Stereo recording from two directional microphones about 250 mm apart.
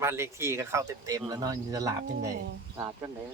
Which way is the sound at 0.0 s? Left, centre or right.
Centre.